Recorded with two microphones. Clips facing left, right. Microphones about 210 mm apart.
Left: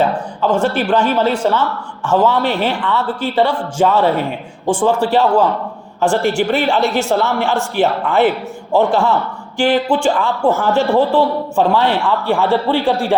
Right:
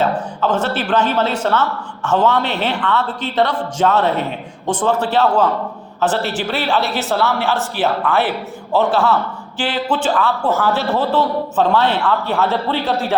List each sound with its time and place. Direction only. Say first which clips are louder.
0.0 s a man's voice: left 2 dB; 10° left (ahead or behind)
8.7 s a man's voice: left 2 dB; 15° left (ahead or behind)